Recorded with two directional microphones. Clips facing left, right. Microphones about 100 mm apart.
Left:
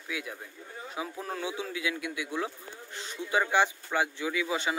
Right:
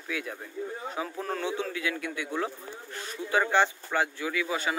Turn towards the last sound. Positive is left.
turn(degrees=20)  # may be behind; listen again after turning